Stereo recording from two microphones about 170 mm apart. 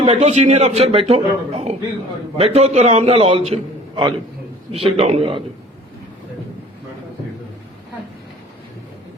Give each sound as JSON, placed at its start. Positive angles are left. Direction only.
{"t": 0.0, "sound": "a man's voice", "side_deg": -40}